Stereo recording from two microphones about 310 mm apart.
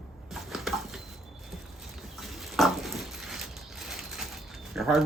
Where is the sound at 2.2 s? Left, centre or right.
Centre.